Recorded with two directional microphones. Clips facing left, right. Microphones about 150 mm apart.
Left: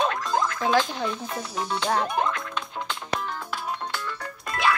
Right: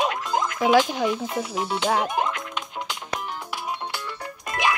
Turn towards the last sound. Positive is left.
turn(degrees=-15)  # may be behind; listen again after turning